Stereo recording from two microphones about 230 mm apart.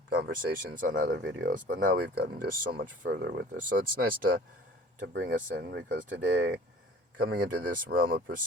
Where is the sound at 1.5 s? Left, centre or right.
Right.